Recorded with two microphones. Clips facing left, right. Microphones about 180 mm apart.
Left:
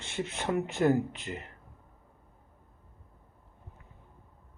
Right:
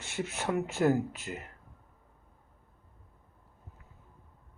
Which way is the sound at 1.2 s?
25° left (ahead or behind).